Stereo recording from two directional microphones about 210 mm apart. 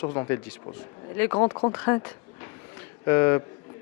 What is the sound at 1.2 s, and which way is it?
Speech, 20° left (ahead or behind).